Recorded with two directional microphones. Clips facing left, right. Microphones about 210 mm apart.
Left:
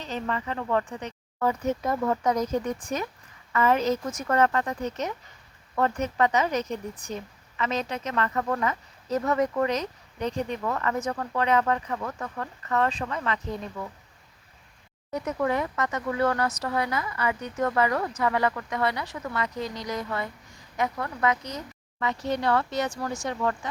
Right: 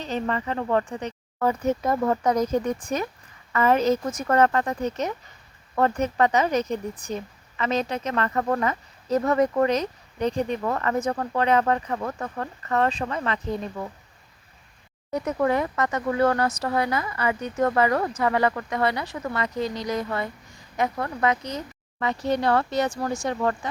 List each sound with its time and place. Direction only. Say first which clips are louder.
0.0 s speech: right 4 dB; 35° right (ahead or behind)
15.1 s speech: right 3 dB; 40° right (ahead or behind)